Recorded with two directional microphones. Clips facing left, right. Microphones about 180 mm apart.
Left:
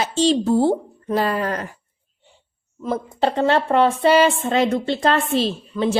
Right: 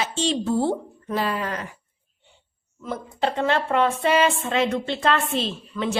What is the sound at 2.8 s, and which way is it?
A woman's voice, 35° left (ahead or behind).